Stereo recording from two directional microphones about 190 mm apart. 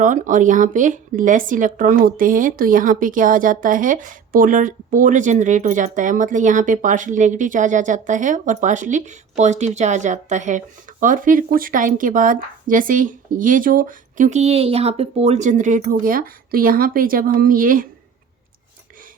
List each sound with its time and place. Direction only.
0.0 s a woman's voice: 40° right (ahead or behind)